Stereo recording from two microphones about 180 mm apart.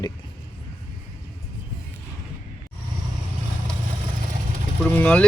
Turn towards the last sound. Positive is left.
turn(degrees=5)  # may be behind; listen again after turning